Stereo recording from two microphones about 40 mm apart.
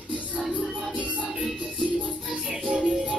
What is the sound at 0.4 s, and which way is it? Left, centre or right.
Music, right.